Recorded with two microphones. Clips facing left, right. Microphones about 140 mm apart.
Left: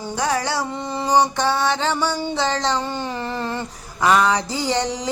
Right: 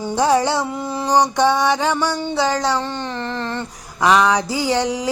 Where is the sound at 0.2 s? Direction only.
25° right (ahead or behind); by 2.7 s 10° right (ahead or behind).